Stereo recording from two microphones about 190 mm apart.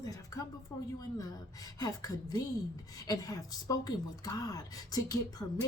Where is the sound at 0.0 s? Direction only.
20° left (ahead or behind).